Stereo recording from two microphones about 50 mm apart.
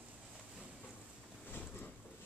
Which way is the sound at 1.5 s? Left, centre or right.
Left.